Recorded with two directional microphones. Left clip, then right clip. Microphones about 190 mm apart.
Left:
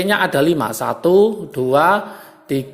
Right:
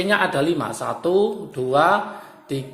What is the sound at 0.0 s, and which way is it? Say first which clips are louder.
Speech: left 4 dB; 35° left (ahead or behind).